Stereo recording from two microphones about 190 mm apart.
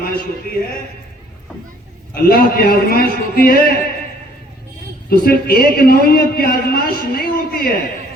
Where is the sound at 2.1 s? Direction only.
50° left (ahead or behind).